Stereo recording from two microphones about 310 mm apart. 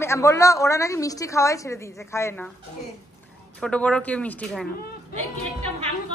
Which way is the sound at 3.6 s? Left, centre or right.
Centre.